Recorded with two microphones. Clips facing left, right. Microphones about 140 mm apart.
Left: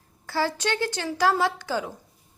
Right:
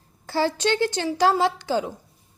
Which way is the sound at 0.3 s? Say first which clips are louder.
Right 4 dB; 25° right (ahead or behind).